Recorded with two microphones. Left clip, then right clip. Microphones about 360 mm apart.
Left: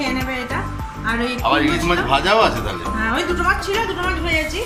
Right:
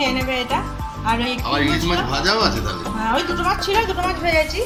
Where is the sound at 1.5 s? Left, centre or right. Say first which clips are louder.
Left 4 dB; centre.